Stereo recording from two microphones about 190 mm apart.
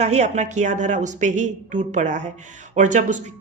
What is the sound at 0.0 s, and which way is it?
Speech, 35° right (ahead or behind).